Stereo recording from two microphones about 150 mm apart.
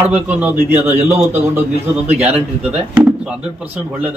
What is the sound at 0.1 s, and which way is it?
A man's voice, 10° right (ahead or behind).